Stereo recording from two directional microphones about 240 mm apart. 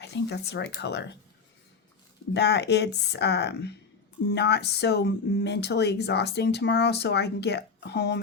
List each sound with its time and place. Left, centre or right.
0.0 s speech: left
2.3 s speech: left